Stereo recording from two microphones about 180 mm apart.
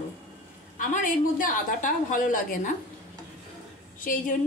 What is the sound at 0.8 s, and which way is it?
A woman's voice, 45° left (ahead or behind).